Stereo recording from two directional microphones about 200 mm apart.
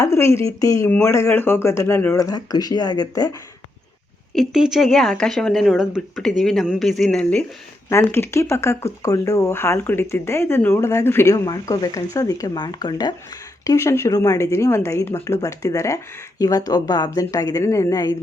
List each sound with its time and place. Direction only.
0.0 s speech: 15° left (ahead or behind)
4.4 s speech: centre (ahead or behind); by 18.2 s 20° left (ahead or behind)